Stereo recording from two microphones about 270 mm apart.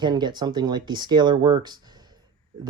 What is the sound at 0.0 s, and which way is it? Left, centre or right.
Speech, centre.